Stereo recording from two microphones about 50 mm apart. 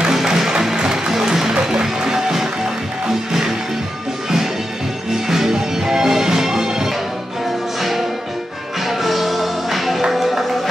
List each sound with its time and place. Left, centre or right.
0.1 s music: centre
5.1 s music: centre
8.8 s music: centre